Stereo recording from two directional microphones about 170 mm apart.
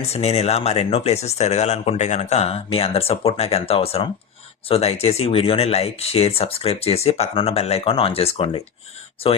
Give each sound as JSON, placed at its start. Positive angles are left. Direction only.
{"t": 0.0, "sound": "speech", "side_deg": 40}